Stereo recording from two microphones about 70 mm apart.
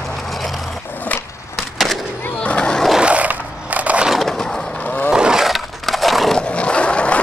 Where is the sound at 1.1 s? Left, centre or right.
Left.